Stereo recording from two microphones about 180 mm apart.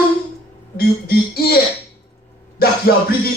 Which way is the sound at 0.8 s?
55° left (ahead or behind).